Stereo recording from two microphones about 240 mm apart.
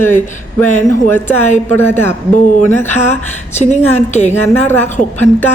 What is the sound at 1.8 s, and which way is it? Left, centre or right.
Speech, centre.